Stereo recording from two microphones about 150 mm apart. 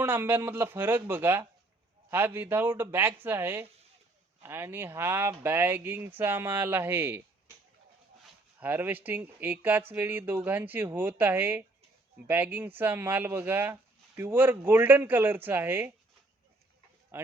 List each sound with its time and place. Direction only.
0.0 s speech: 15° right (ahead or behind)
8.6 s speech: 15° right (ahead or behind)
17.1 s speech: 15° right (ahead or behind)